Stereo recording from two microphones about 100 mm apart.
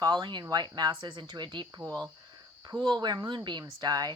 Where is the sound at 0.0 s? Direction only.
45° right (ahead or behind).